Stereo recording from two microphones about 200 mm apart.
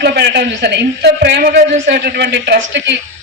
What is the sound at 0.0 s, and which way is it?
Speech, 55° right (ahead or behind).